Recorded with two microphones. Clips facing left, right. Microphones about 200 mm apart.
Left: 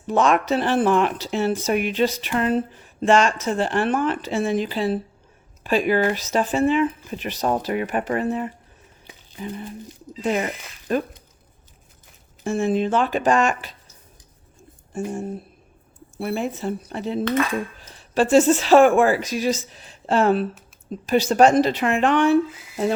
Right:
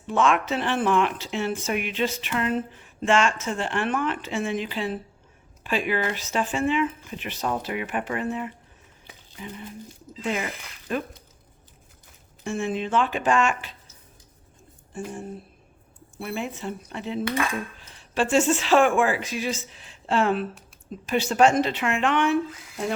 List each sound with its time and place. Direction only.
0.1 s speech: 40° left (ahead or behind)
10.9 s speech: 40° left (ahead or behind)
12.5 s speech: 40° left (ahead or behind)
14.9 s a sound: 45° left (ahead or behind)
16.1 s speech: 40° left (ahead or behind)